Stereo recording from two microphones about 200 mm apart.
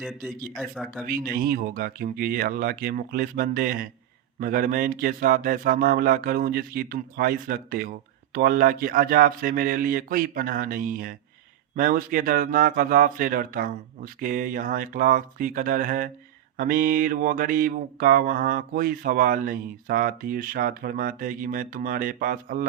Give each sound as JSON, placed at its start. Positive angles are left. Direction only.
{"t": 0.5, "sound": "speech", "side_deg": 0}
{"t": 1.0, "sound": "speech", "side_deg": -45}